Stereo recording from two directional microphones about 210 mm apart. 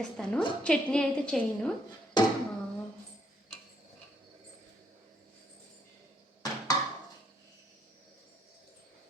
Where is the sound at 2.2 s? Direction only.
20° left (ahead or behind).